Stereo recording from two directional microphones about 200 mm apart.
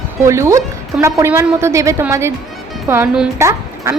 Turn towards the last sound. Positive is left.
turn(degrees=-15)  # may be behind; listen again after turning